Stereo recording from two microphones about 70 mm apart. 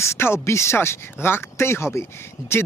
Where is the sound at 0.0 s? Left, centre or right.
Left.